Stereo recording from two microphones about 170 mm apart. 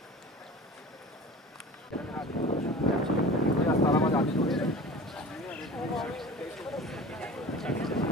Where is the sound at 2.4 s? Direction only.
40° left (ahead or behind).